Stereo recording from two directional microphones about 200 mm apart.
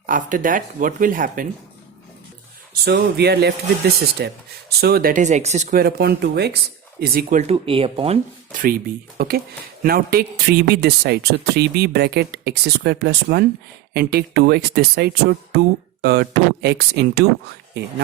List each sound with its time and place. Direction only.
0.0 s speech: 40° right (ahead or behind)
2.8 s speech: 55° right (ahead or behind); by 5.8 s 35° right (ahead or behind)
5.8 s speech: 55° right (ahead or behind); by 8.2 s 30° right (ahead or behind)
8.5 s speech: 45° right (ahead or behind)